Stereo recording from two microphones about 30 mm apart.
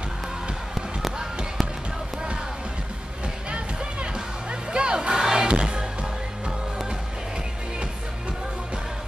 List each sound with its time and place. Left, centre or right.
3.4 s music: right
5.2 s music: centre
5.5 s music: right